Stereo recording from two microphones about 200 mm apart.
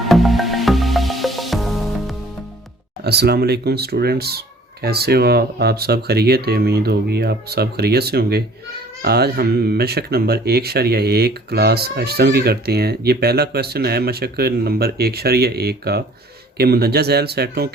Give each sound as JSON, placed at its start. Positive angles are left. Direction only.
{"t": 0.0, "sound": "music", "side_deg": 0}
{"t": 3.0, "sound": "speech", "side_deg": -55}